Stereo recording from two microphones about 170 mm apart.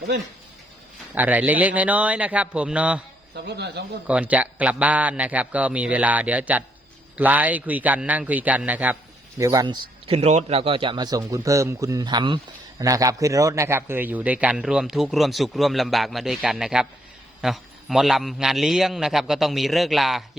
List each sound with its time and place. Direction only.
1.1 s a man's voice: 10° right (ahead or behind)
3.3 s speech: 80° right
4.0 s a man's voice: 10° right (ahead or behind)
9.4 s speech: 20° right (ahead or behind)
10.2 s a man's voice: 40° right (ahead or behind); by 20.2 s centre (ahead or behind)